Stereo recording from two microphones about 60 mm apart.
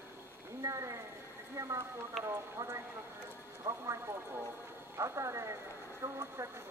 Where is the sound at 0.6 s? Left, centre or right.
Right.